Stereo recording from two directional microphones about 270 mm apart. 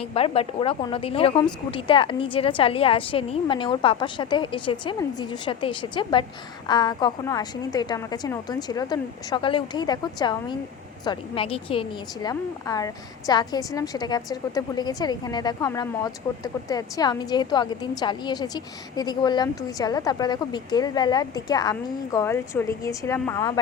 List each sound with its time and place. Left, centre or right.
0.1 s a woman's voice: left